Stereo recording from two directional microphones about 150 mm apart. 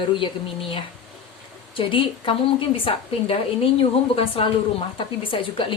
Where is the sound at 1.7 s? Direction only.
35° left (ahead or behind).